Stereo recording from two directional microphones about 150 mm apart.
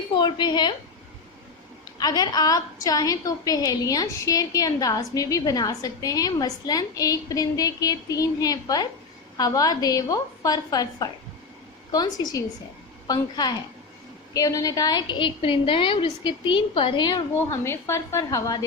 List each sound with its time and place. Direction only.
0.1 s a woman's voice: 30° left (ahead or behind)
2.0 s a woman's voice: 25° left (ahead or behind)
17.3 s a woman's voice: 15° left (ahead or behind)